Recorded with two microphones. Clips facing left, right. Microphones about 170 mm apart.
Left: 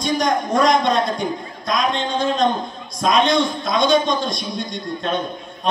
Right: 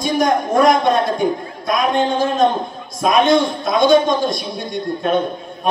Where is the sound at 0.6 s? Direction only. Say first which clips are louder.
Right 3 dB; 55° right (ahead or behind).